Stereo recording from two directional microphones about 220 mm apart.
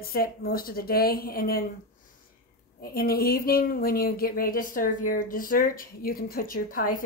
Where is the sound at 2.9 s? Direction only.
45° left (ahead or behind).